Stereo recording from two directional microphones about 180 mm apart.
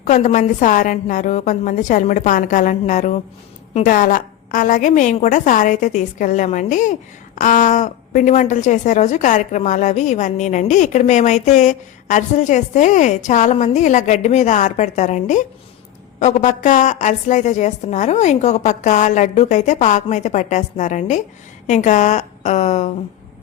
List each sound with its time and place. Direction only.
0.0 s a woman's voice: 40° left (ahead or behind)